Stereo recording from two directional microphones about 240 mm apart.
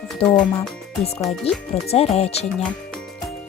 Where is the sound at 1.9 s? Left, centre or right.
Left.